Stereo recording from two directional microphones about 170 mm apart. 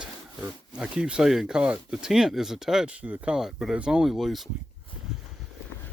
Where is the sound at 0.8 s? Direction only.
5° right (ahead or behind).